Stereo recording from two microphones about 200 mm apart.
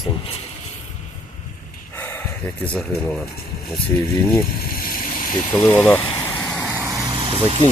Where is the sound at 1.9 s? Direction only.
10° left (ahead or behind).